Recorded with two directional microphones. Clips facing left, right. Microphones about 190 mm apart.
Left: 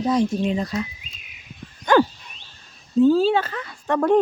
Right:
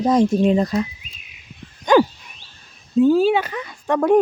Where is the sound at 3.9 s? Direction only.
10° right (ahead or behind).